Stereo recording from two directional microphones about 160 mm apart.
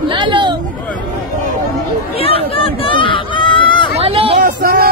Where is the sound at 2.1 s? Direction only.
35° left (ahead or behind).